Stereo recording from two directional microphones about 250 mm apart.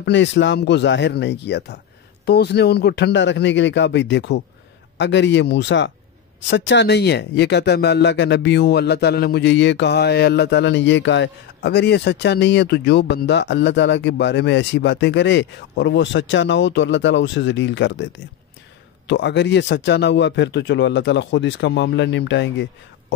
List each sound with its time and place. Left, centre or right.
0.0 s speech: left